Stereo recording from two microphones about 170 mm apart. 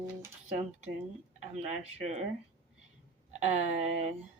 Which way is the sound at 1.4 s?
40° right (ahead or behind).